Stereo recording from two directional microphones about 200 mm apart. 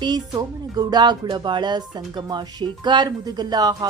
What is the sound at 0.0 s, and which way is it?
Speech, 20° right (ahead or behind).